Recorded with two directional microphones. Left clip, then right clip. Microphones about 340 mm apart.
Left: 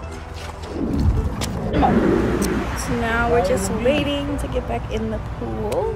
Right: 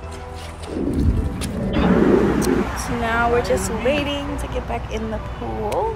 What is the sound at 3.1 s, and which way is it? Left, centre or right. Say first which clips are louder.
Speech: even; centre.